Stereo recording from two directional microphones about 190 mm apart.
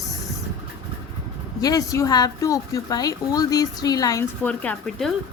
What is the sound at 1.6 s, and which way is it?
Speech, 20° left (ahead or behind).